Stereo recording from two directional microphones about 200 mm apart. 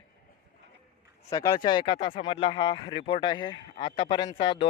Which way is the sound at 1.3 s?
20° left (ahead or behind).